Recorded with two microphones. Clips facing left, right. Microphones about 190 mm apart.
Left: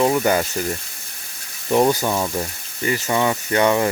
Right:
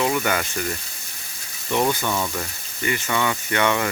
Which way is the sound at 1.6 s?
35° left (ahead or behind).